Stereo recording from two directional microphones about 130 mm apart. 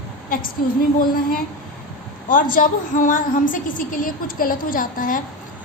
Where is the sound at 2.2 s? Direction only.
90° left.